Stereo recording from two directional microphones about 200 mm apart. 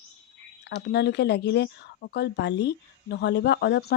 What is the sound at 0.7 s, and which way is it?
Speech, 55° left (ahead or behind).